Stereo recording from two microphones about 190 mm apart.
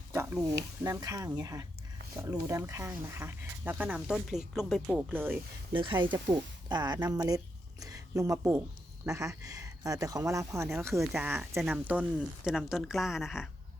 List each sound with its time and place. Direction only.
0.1 s a sound: 10° right (ahead or behind)
0.9 s speech: 15° right (ahead or behind)
5.7 s speech: 25° right (ahead or behind); by 13.5 s centre (ahead or behind)